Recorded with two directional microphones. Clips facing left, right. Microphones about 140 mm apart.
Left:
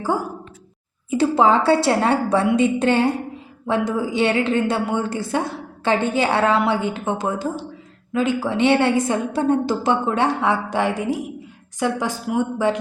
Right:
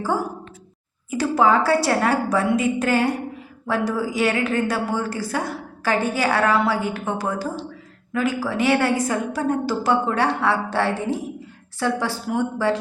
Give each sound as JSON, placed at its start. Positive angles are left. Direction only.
{"t": 1.1, "sound": "a woman's voice", "side_deg": 25}